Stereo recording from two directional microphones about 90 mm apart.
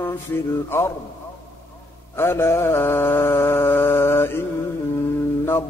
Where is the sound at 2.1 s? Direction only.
25° left (ahead or behind).